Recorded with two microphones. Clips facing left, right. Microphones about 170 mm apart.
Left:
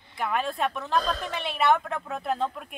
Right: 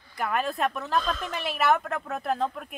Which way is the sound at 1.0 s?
35° left (ahead or behind).